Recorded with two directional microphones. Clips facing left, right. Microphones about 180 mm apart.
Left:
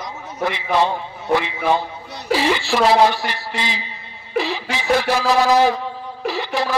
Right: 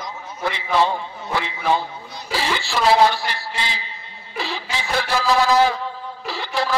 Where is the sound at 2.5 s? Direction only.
20° left (ahead or behind).